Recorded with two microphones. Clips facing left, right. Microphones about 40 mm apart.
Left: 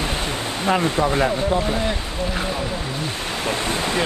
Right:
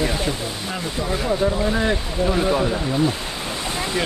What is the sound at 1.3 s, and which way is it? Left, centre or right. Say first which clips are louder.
Speech: even; centre.